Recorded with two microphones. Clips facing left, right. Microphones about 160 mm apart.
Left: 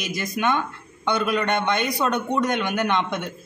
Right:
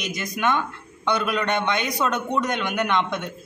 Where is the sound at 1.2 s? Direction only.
Centre (ahead or behind).